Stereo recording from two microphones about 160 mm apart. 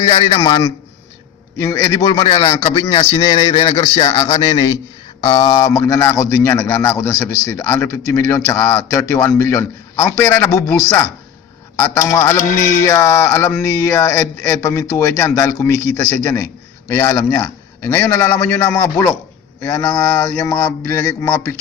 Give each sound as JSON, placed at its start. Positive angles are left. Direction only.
{"t": 0.3, "sound": "a man's voice", "side_deg": 25}
{"t": 2.9, "sound": "speech", "side_deg": 40}
{"t": 4.4, "sound": "a man's voice", "side_deg": 25}
{"t": 5.6, "sound": "a man's voice", "side_deg": 15}
{"t": 12.5, "sound": "mantra", "side_deg": 60}
{"t": 12.8, "sound": "a man's voice", "side_deg": 20}